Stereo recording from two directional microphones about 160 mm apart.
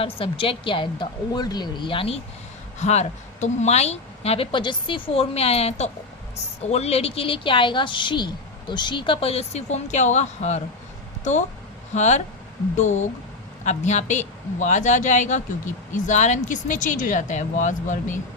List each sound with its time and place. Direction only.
0.0 s a woman's voice: 35° left (ahead or behind); by 18.2 s 50° left (ahead or behind)